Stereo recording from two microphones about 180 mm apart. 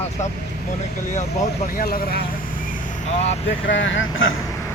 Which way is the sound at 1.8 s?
55° left (ahead or behind).